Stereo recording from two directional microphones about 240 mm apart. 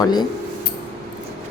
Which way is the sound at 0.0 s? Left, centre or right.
Centre.